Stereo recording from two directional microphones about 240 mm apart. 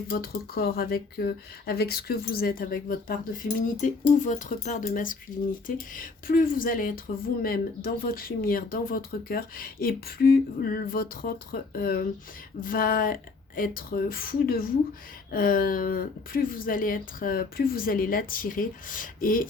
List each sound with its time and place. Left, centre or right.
0.1 s speech: left